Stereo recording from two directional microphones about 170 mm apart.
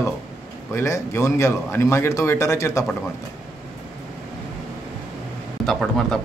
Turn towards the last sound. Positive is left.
turn(degrees=0)  # may be behind; listen again after turning